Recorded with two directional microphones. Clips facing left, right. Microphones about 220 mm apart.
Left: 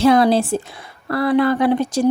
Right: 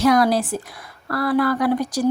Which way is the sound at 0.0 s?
25° left (ahead or behind).